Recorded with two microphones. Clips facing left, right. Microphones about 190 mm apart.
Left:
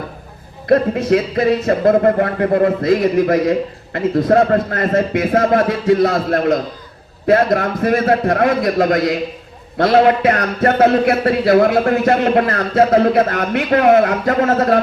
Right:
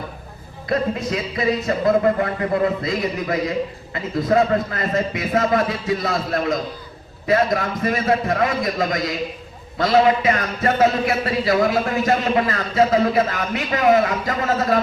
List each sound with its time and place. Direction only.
0.7 s speech: 55° left (ahead or behind)